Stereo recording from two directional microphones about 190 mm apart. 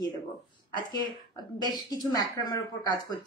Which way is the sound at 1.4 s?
20° left (ahead or behind).